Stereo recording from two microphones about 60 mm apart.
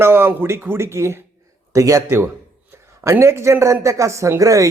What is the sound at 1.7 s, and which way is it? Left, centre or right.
Speech, right.